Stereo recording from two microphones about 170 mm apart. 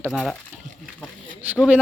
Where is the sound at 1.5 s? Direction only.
10° right (ahead or behind).